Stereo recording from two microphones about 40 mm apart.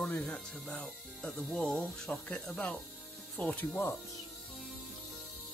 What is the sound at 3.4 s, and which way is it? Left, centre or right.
Speech, left.